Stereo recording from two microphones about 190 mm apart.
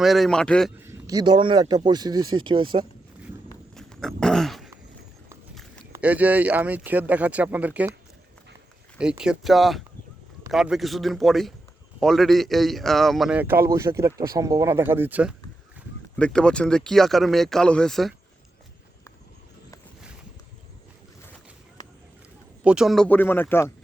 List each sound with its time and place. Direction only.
0.0 s speech: centre (ahead or behind)
0.8 s speech: 15° right (ahead or behind)
3.8 s a sound: centre (ahead or behind)
5.9 s a man's voice: 10° right (ahead or behind)
9.0 s a man's voice: 5° right (ahead or behind)
16.1 s speech: 5° left (ahead or behind)
22.6 s speech: 5° right (ahead or behind); by 23.7 s 10° left (ahead or behind)